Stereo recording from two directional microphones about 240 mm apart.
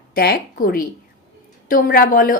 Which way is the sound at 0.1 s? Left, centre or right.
Left.